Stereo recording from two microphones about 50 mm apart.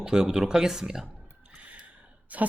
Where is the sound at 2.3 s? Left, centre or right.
Right.